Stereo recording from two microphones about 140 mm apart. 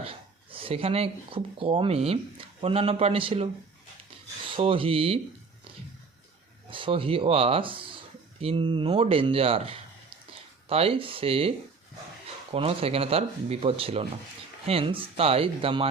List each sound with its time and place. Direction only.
0.5 s speech: 40° right (ahead or behind)
4.5 s speech: 40° right (ahead or behind)
6.7 s speech: 40° right (ahead or behind)